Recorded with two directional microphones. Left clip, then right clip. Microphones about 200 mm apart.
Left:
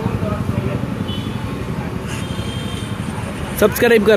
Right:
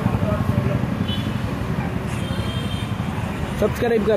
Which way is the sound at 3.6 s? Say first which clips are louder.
Left 7 dB; 35° left (ahead or behind).